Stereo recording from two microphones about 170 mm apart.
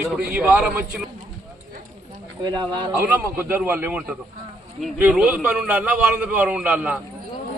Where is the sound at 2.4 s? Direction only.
25° right (ahead or behind).